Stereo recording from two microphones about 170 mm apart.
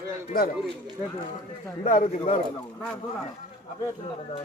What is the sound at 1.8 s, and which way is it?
Speech, 50° left (ahead or behind).